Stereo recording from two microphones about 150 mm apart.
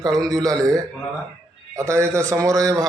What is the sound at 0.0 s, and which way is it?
A man's voice, 25° right (ahead or behind).